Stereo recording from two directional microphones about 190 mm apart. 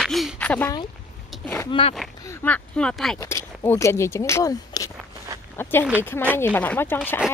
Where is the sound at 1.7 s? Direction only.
30° left (ahead or behind).